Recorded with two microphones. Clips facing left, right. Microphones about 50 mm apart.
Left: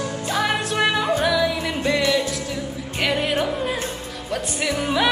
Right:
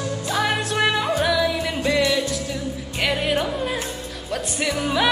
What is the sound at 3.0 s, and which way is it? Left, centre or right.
Music, centre.